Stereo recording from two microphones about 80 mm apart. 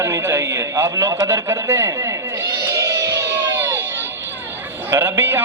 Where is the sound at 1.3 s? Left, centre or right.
Right.